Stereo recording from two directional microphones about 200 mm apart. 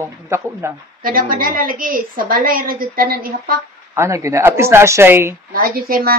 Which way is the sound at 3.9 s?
15° right (ahead or behind).